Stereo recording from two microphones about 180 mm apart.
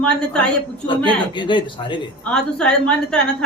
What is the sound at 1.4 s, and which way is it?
Speech, 25° left (ahead or behind).